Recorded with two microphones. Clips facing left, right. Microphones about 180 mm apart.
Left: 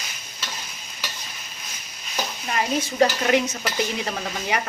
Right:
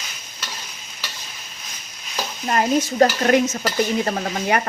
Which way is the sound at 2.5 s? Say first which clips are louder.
Right 6 dB; 45° right (ahead or behind).